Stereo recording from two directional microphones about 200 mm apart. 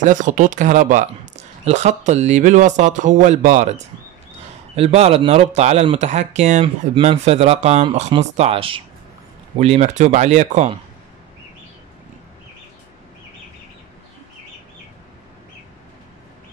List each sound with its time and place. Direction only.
0.0 s speech: 40° right (ahead or behind)